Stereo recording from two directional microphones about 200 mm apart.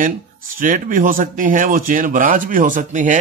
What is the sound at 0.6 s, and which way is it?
Speech, 40° right (ahead or behind).